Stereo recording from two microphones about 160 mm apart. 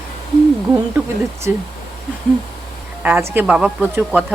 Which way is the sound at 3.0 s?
15° right (ahead or behind).